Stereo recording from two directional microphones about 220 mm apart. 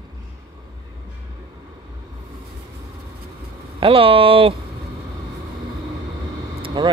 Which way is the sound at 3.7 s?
25° right (ahead or behind).